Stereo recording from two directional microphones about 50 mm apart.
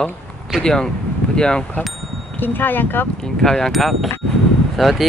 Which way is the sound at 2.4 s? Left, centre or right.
Left.